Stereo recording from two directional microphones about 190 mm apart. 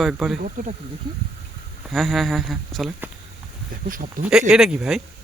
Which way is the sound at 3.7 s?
45° right (ahead or behind).